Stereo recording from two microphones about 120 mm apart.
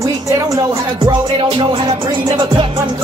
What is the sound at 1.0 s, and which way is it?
Speech, 40° right (ahead or behind).